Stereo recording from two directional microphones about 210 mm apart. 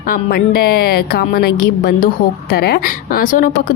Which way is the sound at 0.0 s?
45° left (ahead or behind).